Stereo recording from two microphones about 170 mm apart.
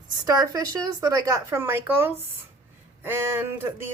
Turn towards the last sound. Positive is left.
turn(degrees=-15)  # may be behind; listen again after turning